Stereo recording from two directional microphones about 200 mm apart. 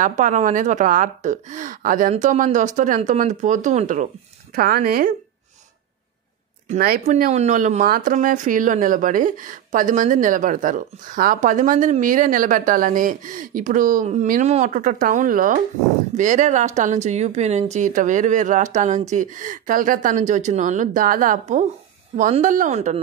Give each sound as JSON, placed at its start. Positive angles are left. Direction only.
{"t": 0.0, "sound": "speech", "side_deg": -40}
{"t": 4.6, "sound": "speech", "side_deg": -45}
{"t": 7.1, "sound": "speech", "side_deg": -35}